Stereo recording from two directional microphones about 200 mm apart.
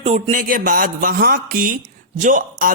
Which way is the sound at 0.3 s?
45° right (ahead or behind).